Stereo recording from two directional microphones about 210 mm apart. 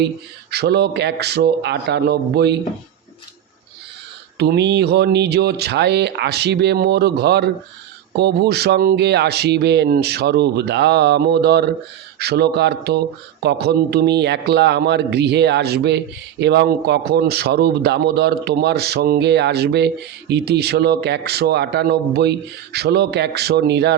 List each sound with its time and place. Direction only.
0.5 s a man's voice: 50° right (ahead or behind)
4.4 s a man's voice: 55° right (ahead or behind)